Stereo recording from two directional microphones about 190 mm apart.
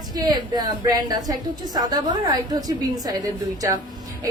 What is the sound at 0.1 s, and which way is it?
A woman's voice, 20° right (ahead or behind).